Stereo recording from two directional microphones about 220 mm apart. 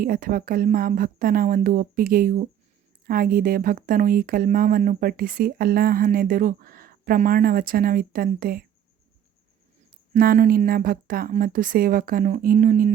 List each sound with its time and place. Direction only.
0.0 s speech: 40° right (ahead or behind)
10.2 s speech: 40° right (ahead or behind)